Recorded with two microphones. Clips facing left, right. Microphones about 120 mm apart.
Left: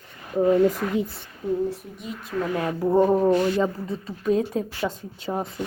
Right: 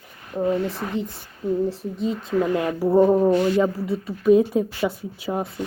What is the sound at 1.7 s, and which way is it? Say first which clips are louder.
Speech: right 7 dB; 30° right (ahead or behind).